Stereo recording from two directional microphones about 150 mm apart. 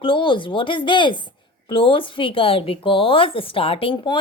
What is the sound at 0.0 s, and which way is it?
A woman's voice, 35° left (ahead or behind).